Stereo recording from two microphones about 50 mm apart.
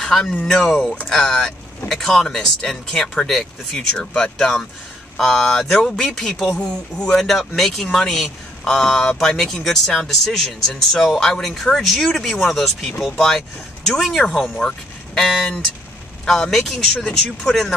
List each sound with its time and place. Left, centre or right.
0.0 s a sound: centre
0.4 s speech: centre
14.2 s speech: centre